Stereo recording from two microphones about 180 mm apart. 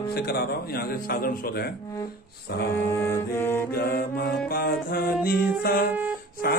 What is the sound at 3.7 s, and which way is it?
A man's voice, 55° left (ahead or behind).